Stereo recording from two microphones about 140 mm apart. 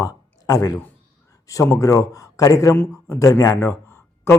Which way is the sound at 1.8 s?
25° left (ahead or behind).